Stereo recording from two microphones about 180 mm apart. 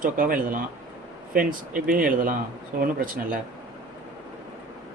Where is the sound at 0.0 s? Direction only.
50° right (ahead or behind).